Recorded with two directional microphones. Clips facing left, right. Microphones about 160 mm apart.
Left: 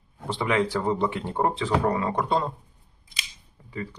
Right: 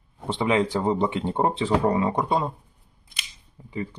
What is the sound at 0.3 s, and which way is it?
Speech, 20° right (ahead or behind).